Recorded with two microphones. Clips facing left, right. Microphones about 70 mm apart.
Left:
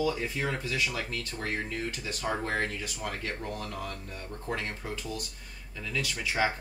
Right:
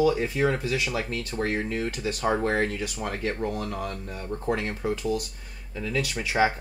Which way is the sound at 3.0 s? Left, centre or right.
Right.